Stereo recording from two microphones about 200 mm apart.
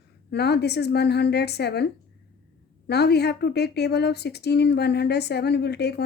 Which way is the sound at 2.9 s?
55° left (ahead or behind).